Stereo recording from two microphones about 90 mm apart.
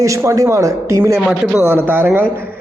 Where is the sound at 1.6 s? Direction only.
20° right (ahead or behind).